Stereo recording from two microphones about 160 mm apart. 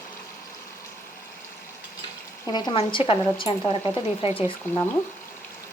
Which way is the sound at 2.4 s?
25° left (ahead or behind).